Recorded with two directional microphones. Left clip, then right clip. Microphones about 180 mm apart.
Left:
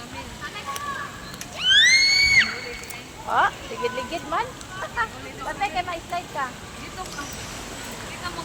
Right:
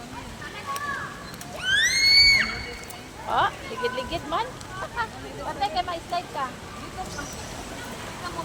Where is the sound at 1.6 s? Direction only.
45° right (ahead or behind).